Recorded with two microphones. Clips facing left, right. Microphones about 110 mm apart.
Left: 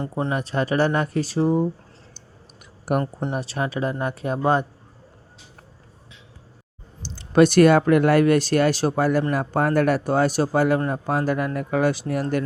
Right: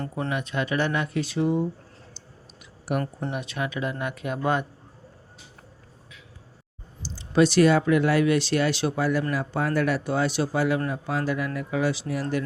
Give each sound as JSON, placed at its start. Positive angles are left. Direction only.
{"t": 0.3, "sound": "speech", "side_deg": 35}
{"t": 3.0, "sound": "speech", "side_deg": 20}
{"t": 3.3, "sound": "speech", "side_deg": 35}
{"t": 7.0, "sound": "speech", "side_deg": 60}